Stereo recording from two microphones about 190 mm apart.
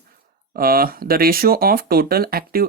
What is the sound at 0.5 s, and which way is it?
Speech, 50° right (ahead or behind).